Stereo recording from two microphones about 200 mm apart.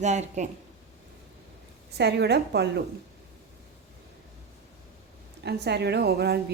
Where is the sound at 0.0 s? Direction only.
35° right (ahead or behind).